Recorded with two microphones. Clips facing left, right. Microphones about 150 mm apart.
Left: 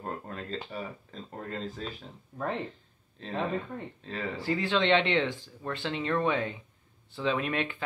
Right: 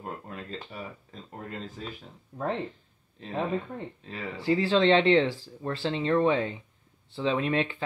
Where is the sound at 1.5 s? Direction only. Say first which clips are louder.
Left 3 dB; 10° right (ahead or behind).